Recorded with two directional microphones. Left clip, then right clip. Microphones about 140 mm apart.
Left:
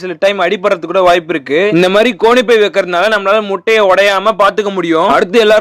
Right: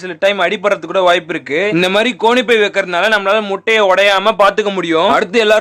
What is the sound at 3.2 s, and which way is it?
Speech, 20° left (ahead or behind).